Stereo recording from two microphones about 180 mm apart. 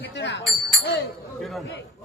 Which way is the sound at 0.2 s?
80° left.